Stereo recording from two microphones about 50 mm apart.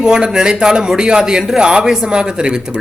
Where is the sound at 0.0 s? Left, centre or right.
Centre.